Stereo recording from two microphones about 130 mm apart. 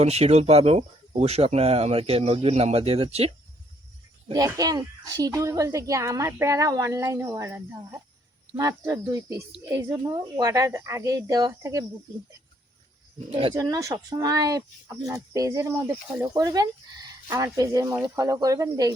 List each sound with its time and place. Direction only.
0.0 s speech: 55° right (ahead or behind)
4.3 s speech: 30° right (ahead or behind)
13.5 s speech: 25° right (ahead or behind)